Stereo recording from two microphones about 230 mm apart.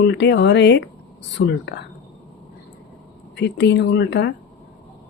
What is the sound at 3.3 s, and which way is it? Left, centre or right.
Speech, left.